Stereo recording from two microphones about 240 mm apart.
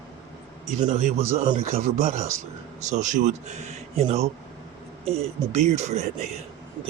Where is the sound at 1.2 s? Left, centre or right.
Centre.